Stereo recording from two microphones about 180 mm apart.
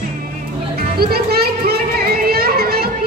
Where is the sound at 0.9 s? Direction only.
60° right (ahead or behind).